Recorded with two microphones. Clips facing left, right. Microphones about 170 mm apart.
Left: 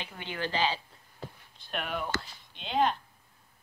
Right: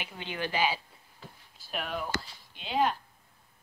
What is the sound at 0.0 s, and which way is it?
A woman's voice, 15° right (ahead or behind).